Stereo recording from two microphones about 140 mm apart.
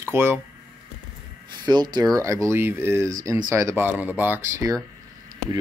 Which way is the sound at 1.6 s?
30° right (ahead or behind).